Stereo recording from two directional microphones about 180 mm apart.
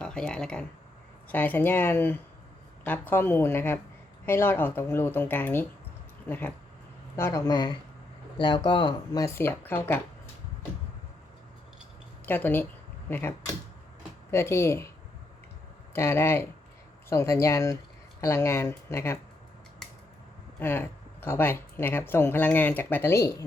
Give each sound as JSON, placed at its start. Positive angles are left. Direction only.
{"t": 0.0, "sound": "speech", "side_deg": 5}
{"t": 12.2, "sound": "speech", "side_deg": 10}
{"t": 15.9, "sound": "speech", "side_deg": 15}
{"t": 19.8, "sound": "scissors", "side_deg": 5}
{"t": 20.6, "sound": "speech", "side_deg": 10}